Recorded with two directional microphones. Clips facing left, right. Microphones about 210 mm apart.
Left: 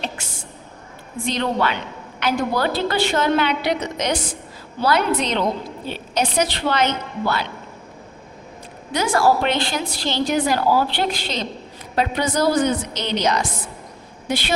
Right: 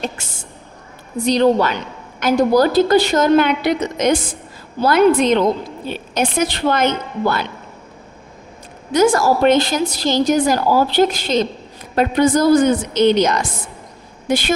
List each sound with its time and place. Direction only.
1.2 s a woman's voice: 40° right (ahead or behind)
8.9 s a woman's voice: 45° right (ahead or behind)